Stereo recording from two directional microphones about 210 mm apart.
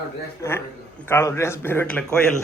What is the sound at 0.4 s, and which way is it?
A man's voice, 15° left (ahead or behind).